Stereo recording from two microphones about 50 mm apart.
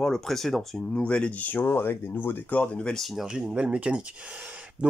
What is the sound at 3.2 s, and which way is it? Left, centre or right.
Speech, centre.